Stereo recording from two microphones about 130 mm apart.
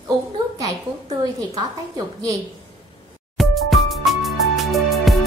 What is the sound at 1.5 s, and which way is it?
Speech, 30° right (ahead or behind).